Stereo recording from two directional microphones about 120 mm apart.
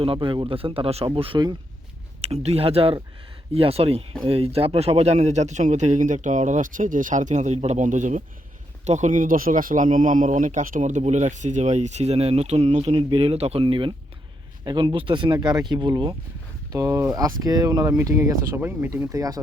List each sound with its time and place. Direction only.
0.0 s speech: 45° right (ahead or behind)
2.2 s speech: 65° right (ahead or behind); by 16.1 s 40° right (ahead or behind)
16.7 s speech: 25° right (ahead or behind)
19.1 s speech: 30° right (ahead or behind)